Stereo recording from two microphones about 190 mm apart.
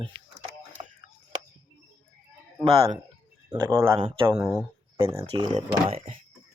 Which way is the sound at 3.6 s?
15° right (ahead or behind).